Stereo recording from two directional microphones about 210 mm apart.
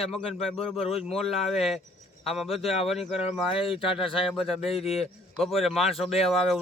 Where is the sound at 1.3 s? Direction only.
30° left (ahead or behind).